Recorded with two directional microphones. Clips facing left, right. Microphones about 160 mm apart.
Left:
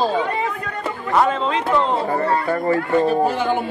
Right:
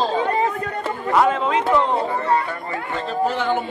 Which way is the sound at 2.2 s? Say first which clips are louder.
Left 2 dB; 45° left (ahead or behind).